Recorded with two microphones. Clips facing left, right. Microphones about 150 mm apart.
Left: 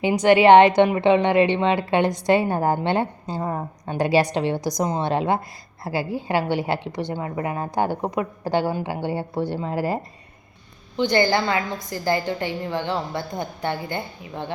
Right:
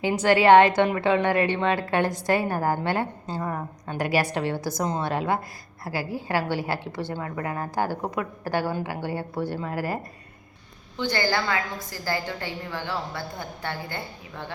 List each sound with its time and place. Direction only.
0.0 s a woman's voice: 15° left (ahead or behind)